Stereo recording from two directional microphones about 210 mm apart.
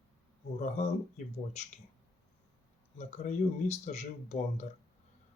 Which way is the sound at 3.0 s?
30° left (ahead or behind).